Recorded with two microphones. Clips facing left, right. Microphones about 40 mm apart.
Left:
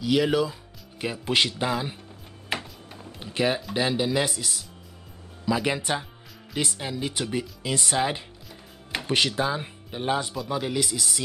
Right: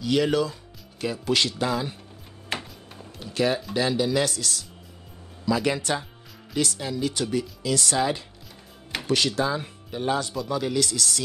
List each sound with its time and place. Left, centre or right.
0.0 s speech: centre
0.9 s speech: left
2.5 s music: centre
3.2 s speech: left